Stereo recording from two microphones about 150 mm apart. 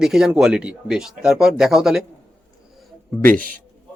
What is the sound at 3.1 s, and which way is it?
Speech, centre (ahead or behind).